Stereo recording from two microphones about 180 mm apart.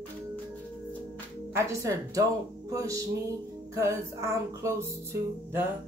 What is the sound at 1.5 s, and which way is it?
Music, 15° right (ahead or behind).